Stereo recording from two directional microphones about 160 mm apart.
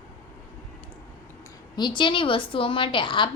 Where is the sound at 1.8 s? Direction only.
30° left (ahead or behind).